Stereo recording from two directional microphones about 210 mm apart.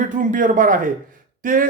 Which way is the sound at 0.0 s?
40° right (ahead or behind).